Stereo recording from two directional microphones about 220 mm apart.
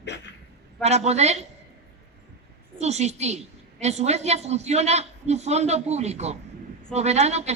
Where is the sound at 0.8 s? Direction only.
30° right (ahead or behind).